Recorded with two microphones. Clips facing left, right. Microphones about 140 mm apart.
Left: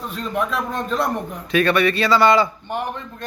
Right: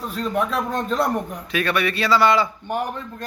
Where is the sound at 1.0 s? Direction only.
5° right (ahead or behind).